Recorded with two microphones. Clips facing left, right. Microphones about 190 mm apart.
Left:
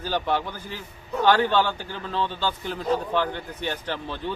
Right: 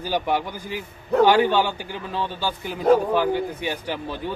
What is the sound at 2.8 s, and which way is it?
Speech, 55° right (ahead or behind).